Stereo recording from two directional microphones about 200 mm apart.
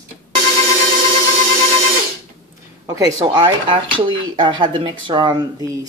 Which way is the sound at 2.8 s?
15° right (ahead or behind).